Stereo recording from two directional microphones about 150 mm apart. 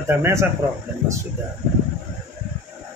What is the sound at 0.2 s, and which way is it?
Speech, 20° right (ahead or behind).